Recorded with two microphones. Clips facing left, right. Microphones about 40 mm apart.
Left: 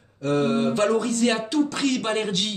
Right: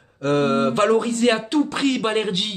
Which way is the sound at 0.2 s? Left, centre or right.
Right.